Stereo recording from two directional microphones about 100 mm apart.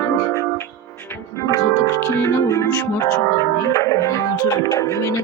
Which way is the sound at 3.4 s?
35° left (ahead or behind).